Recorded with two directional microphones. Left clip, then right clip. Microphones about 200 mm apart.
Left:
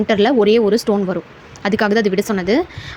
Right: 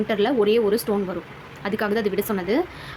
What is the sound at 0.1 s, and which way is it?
A woman's voice, 30° left (ahead or behind).